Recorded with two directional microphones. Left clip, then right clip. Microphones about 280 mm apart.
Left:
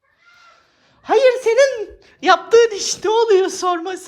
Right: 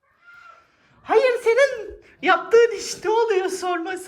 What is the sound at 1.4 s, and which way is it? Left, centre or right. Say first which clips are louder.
Speech: left 4 dB; left.